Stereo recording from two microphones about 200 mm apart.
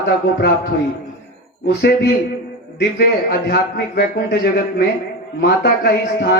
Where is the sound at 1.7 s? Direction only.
55° left (ahead or behind).